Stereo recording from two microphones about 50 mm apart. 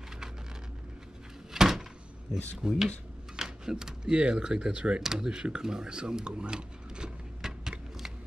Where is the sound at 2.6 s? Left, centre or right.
Centre.